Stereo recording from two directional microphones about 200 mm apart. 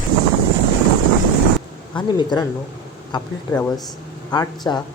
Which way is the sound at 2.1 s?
20° left (ahead or behind).